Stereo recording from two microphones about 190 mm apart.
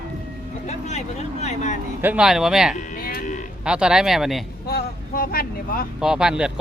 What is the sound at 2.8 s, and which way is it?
Music, 45° left (ahead or behind).